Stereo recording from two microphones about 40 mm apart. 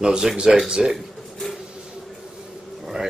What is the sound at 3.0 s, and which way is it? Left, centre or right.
Speech, right.